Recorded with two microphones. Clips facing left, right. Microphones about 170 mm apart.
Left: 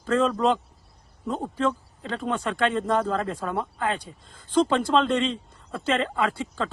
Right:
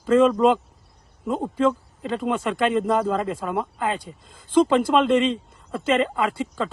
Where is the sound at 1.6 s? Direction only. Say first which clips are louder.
Right 5 dB; 5° right (ahead or behind).